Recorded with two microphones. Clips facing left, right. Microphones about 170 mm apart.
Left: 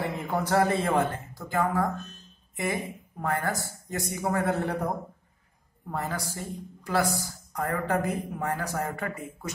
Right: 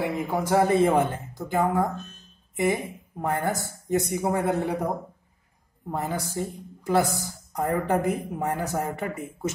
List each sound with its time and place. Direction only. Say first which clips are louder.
0.0 s speech: right 3 dB; 10° right (ahead or behind)